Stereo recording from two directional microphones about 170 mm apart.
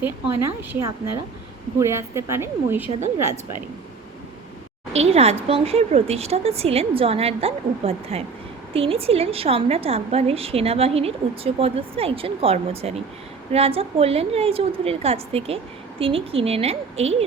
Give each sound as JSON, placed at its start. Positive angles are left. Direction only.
{"t": 0.0, "sound": "a woman's voice", "side_deg": -15}
{"t": 4.9, "sound": "a woman's voice", "side_deg": -40}